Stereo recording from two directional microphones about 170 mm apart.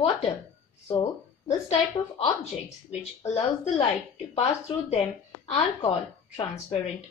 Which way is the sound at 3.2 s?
45° left (ahead or behind).